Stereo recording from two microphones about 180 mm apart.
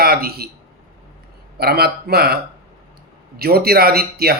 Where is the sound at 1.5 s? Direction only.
60° right (ahead or behind).